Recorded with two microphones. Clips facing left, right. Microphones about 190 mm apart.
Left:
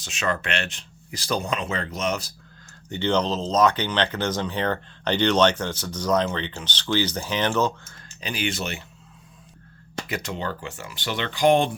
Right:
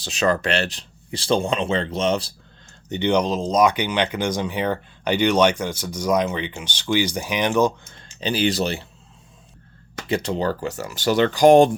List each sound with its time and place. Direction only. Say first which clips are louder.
0.0 s speech: right 6 dB; 35° right (ahead or behind)
2.9 s speech: right 3 dB; 15° right (ahead or behind)
8.2 s speech: right 7 dB; 30° right (ahead or behind)
10.1 s speech: right 8 dB; 30° right (ahead or behind)